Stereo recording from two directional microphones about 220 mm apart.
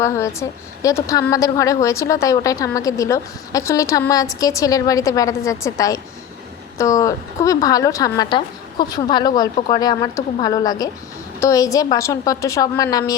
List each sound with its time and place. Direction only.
0.0 s a woman's voice: 15° left (ahead or behind)